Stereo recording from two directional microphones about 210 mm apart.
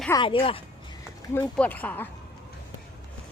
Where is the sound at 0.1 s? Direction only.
25° left (ahead or behind).